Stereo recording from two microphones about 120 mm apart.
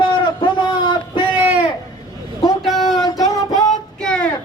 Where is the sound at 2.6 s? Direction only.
Centre (ahead or behind).